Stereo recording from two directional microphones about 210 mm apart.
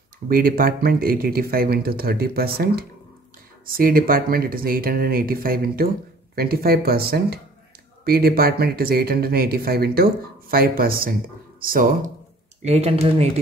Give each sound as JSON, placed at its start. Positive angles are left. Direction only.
{"t": 0.3, "sound": "speech", "side_deg": -45}
{"t": 12.6, "sound": "speech", "side_deg": -30}